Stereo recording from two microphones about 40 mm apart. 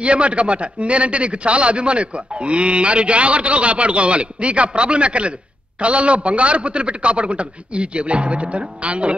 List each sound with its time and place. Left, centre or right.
0.0 s a man's voice: right